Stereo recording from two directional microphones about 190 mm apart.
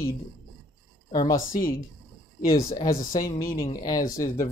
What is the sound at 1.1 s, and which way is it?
Speech, 20° left (ahead or behind).